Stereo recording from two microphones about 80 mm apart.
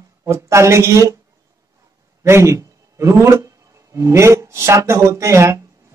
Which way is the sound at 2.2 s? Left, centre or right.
Right.